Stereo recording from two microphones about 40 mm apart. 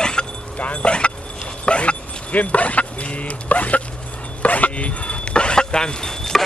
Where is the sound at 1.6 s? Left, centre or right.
Left.